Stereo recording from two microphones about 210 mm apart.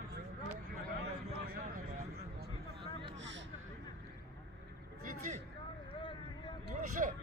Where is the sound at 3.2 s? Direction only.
60° right (ahead or behind).